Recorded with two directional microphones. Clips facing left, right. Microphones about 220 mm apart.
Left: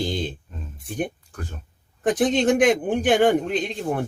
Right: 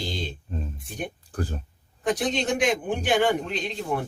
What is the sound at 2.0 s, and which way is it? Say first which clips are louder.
A man's voice: left 6 dB; 50° left (ahead or behind).